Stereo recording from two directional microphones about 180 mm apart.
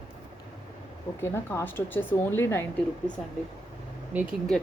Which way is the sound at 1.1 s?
15° left (ahead or behind).